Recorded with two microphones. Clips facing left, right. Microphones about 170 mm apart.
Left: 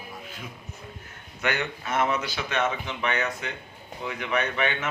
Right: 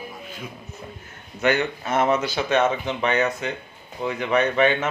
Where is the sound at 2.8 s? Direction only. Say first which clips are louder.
Right 6 dB; 35° right (ahead or behind).